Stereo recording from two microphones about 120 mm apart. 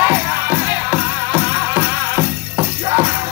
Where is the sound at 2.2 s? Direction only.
25° right (ahead or behind).